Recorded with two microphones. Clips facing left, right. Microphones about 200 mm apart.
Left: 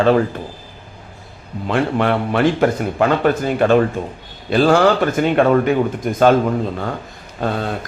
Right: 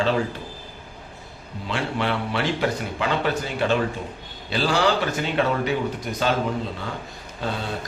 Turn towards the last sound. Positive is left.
turn(degrees=55)  # may be behind; listen again after turning